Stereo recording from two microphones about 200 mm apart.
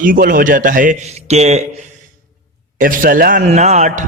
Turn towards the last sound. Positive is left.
turn(degrees=-40)  # may be behind; listen again after turning